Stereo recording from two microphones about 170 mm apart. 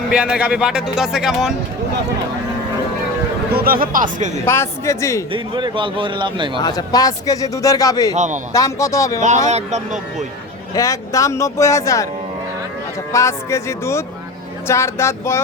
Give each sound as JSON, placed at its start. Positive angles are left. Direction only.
{"t": 0.1, "sound": "speech", "side_deg": -5}
{"t": 3.5, "sound": "a man's voice", "side_deg": -60}
{"t": 4.4, "sound": "speech", "side_deg": 15}
{"t": 5.3, "sound": "a man's voice", "side_deg": -30}
{"t": 6.6, "sound": "speech", "side_deg": 25}
{"t": 8.1, "sound": "speech", "side_deg": -45}
{"t": 8.5, "sound": "speech", "side_deg": 20}
{"t": 9.5, "sound": "speech", "side_deg": -40}
{"t": 10.8, "sound": "speech", "side_deg": 20}
{"t": 13.1, "sound": "speech", "side_deg": 15}